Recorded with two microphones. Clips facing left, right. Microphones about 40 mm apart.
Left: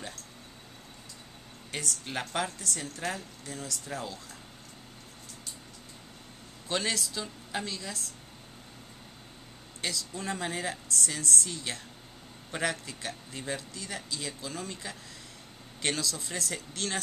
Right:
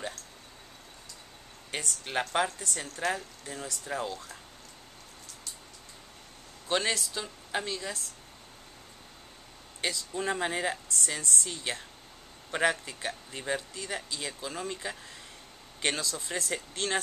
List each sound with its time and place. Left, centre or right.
1.7 s speech: centre
6.7 s speech: centre
9.8 s a man's voice: centre